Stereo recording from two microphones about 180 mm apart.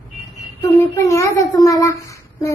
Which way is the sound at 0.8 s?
15° left (ahead or behind).